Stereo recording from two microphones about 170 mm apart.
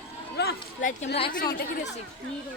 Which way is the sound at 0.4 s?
75° left (ahead or behind).